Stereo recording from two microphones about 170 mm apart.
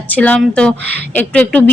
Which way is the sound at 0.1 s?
10° left (ahead or behind).